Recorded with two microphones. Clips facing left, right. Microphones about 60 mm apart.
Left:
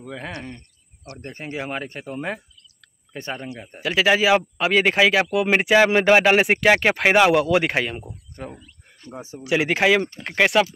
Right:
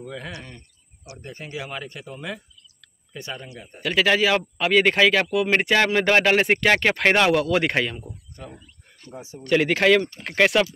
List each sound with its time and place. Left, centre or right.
1.1 s speech: left
3.8 s speech: centre
8.1 s speech: left
9.4 s speech: centre